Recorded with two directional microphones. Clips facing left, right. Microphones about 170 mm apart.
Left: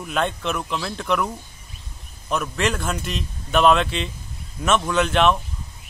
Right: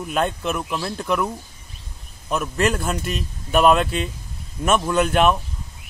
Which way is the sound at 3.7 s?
45° right (ahead or behind).